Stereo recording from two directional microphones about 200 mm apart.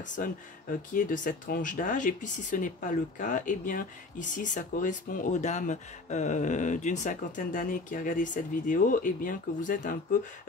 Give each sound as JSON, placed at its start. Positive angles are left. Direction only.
{"t": 0.2, "sound": "speech", "side_deg": 45}